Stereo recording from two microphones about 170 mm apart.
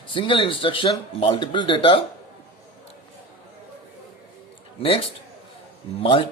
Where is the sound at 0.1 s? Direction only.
30° left (ahead or behind).